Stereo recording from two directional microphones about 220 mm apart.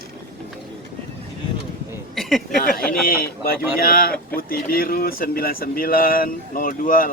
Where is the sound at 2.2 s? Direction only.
Centre (ahead or behind).